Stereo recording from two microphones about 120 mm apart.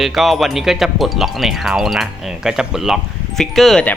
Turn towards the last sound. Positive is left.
turn(degrees=0)  # may be behind; listen again after turning